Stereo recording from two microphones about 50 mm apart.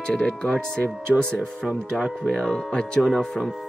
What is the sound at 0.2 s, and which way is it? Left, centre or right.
Speech, left.